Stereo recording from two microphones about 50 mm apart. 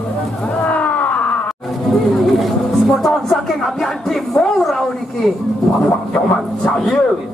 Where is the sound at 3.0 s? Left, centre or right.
Centre.